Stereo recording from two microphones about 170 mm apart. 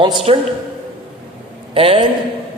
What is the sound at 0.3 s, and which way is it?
Speech, 30° right (ahead or behind).